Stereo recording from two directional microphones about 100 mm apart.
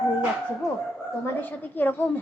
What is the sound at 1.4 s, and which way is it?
Speech, 20° left (ahead or behind).